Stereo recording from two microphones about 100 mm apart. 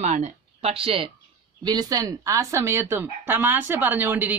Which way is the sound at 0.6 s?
65° right (ahead or behind).